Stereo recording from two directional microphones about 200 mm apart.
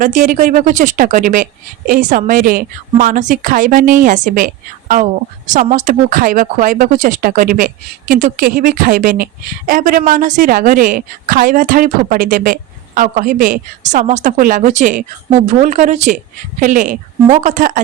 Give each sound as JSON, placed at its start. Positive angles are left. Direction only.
{"t": 0.0, "sound": "a woman's voice", "side_deg": -40}